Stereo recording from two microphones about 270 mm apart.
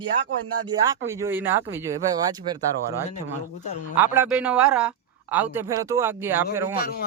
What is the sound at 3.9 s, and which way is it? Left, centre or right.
A man's voice, centre.